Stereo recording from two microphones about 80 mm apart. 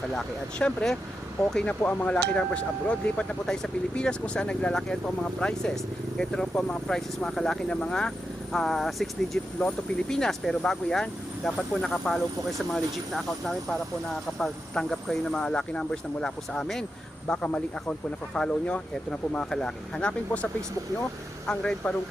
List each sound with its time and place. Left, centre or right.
0.1 s speech: centre
17.2 s speech: centre